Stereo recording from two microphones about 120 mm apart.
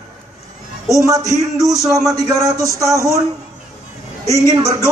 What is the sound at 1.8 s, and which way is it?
Speech, centre (ahead or behind).